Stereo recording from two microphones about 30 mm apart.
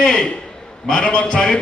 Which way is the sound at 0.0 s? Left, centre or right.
Left.